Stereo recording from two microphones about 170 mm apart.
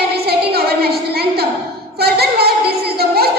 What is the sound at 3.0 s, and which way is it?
Music, 65° right (ahead or behind).